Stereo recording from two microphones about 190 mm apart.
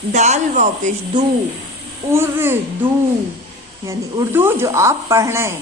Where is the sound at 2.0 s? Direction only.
10° right (ahead or behind).